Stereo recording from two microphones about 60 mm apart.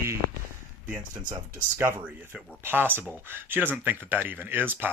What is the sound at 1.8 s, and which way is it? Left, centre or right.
Speech, right.